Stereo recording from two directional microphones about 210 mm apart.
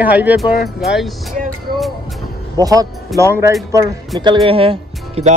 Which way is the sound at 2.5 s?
15° right (ahead or behind).